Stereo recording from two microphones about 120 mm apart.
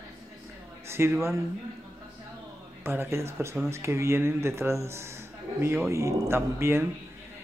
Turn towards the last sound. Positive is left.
turn(degrees=-20)  # may be behind; listen again after turning